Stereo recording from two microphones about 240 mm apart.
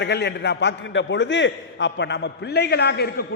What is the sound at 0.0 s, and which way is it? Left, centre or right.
A man's voice, left.